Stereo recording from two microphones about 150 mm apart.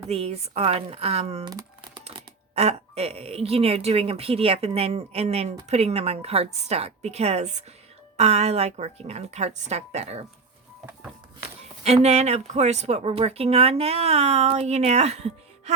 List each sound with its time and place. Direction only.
0.1 s speech: 45° right (ahead or behind)
1.5 s crumpling: 25° right (ahead or behind)
2.0 s speech: 45° right (ahead or behind)
11.8 s speech: 45° right (ahead or behind)